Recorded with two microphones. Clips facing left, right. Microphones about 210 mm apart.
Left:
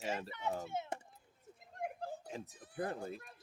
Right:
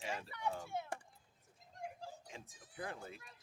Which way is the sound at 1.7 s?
60° left (ahead or behind).